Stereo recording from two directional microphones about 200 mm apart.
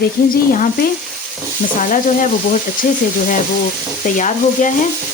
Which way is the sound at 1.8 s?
40° left (ahead or behind).